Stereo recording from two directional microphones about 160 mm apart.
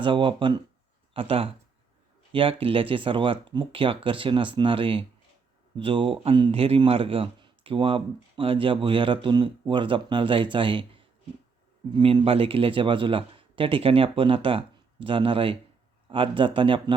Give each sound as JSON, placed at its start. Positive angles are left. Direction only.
{"t": 0.0, "sound": "speech", "side_deg": -30}